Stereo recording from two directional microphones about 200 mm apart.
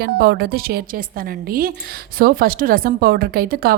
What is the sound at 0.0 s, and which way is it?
A woman's voice, 55° right (ahead or behind).